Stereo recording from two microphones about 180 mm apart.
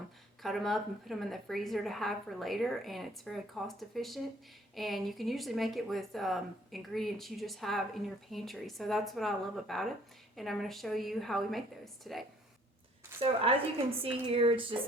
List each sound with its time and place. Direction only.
0.4 s speech: centre (ahead or behind)
13.1 s speech: 30° right (ahead or behind)